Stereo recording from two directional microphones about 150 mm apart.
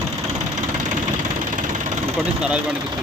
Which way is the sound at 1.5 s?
60° right (ahead or behind).